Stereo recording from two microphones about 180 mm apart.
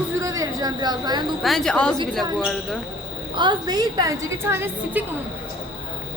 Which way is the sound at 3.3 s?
25° right (ahead or behind).